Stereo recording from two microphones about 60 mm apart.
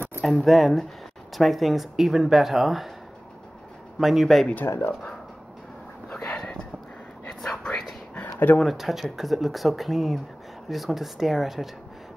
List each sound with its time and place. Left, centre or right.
0.2 s speech: centre
4.0 s speech: centre
4.6 s speech: left
6.1 s a sound: centre
8.1 s a sound: left
8.5 s speech: centre